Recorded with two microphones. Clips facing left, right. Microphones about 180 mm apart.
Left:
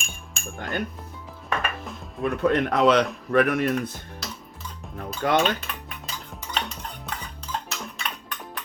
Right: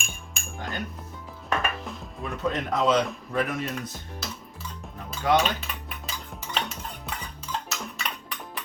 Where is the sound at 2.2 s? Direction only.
60° left (ahead or behind).